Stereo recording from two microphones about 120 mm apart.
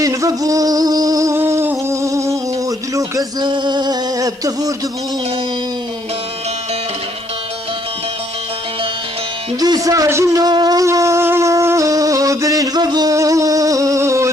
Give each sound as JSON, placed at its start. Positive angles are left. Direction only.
{"t": 0.0, "sound": "a sound", "side_deg": -30}
{"t": 9.6, "sound": "a man's voice", "side_deg": -30}
{"t": 10.4, "sound": "wind instrument", "side_deg": -35}